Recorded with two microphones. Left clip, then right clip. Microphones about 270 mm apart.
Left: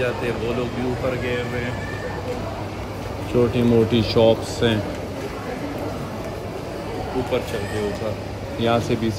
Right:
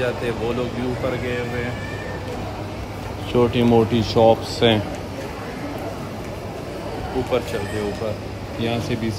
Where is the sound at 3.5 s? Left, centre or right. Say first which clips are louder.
Right 1 dB; centre.